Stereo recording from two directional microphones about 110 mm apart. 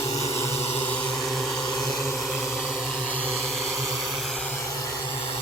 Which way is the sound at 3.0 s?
15° left (ahead or behind).